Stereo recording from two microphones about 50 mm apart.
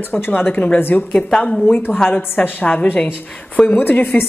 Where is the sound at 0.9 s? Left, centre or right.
Left.